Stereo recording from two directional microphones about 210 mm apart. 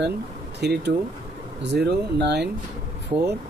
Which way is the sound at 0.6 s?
50° right (ahead or behind).